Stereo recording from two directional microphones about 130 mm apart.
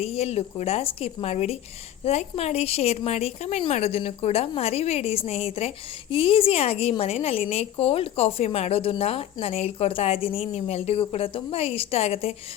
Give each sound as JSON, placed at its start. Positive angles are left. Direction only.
{"t": 0.0, "sound": "a woman's voice", "side_deg": 50}